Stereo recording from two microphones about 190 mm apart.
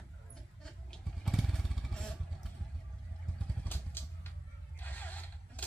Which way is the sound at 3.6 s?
10° left (ahead or behind).